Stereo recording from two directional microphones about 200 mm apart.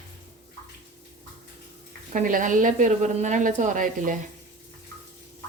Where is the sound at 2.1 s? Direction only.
40° right (ahead or behind).